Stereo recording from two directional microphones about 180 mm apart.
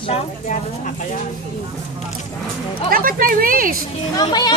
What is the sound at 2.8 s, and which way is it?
Speech, 55° right (ahead or behind).